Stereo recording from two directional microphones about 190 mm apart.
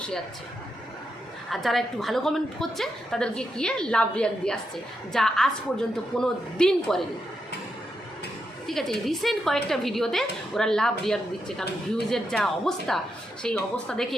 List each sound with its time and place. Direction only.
1.5 s a woman's voice: centre (ahead or behind)
8.6 s a woman's voice: centre (ahead or behind)